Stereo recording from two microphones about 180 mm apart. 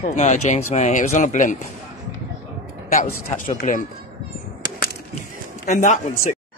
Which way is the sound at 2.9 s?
40° left (ahead or behind).